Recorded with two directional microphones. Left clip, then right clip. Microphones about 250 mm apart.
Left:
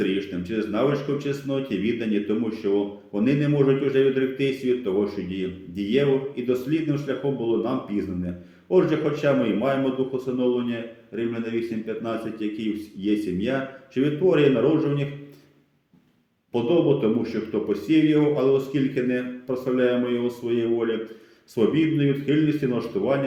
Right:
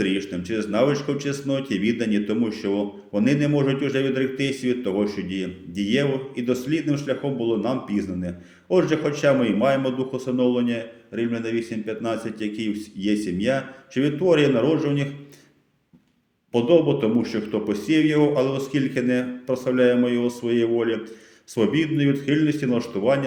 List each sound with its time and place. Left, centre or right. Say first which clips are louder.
0.0 s a man's voice: right 1 dB; right
16.5 s a man's voice: right 3 dB; right